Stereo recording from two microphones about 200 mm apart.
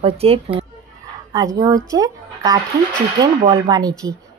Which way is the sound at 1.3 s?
20° right (ahead or behind).